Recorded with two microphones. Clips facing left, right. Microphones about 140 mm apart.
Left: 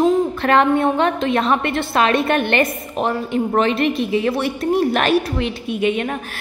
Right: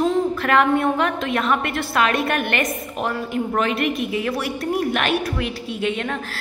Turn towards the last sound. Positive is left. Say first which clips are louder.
# left 4 dB
turn(degrees=15)  # may be behind; listen again after turning